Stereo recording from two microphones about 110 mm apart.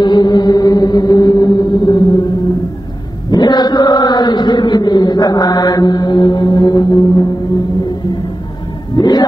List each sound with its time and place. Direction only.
0.0 s chant: 40° left (ahead or behind)
3.3 s chant: 40° left (ahead or behind)
8.9 s a sound: 40° left (ahead or behind)